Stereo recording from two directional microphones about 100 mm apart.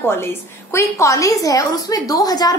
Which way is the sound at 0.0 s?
25° left (ahead or behind).